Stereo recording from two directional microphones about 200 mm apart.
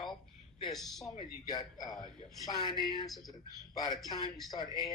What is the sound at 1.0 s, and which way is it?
Speech, 20° left (ahead or behind).